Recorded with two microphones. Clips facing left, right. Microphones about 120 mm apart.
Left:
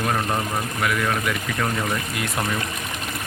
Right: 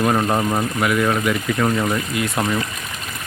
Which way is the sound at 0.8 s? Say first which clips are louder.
Right 4 dB; 15° right (ahead or behind).